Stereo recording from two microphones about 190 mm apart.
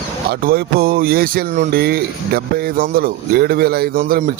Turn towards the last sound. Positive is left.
turn(degrees=-50)  # may be behind; listen again after turning